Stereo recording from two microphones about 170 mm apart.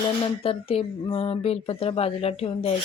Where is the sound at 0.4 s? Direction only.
35° left (ahead or behind).